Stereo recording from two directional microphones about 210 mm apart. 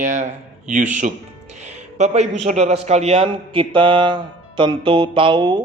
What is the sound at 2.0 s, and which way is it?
A man's voice, 30° right (ahead or behind).